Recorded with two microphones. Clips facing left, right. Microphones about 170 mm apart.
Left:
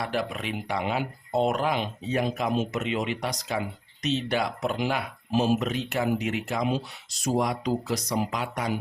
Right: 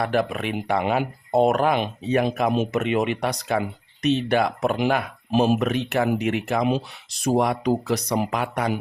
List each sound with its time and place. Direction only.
0.0 s speech: 55° right (ahead or behind)